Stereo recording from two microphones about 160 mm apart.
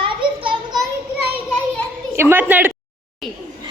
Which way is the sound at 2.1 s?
15° right (ahead or behind).